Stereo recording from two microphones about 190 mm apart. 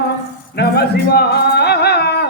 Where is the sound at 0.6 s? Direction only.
60° left (ahead or behind).